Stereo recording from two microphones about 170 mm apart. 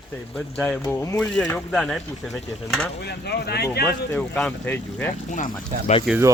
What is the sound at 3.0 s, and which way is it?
Speech, 75° left (ahead or behind).